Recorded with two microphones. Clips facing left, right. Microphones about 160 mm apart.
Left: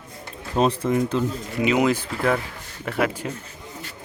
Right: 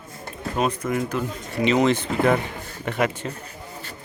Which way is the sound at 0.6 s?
30° left (ahead or behind).